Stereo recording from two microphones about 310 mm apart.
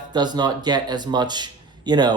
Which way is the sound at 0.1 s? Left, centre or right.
Centre.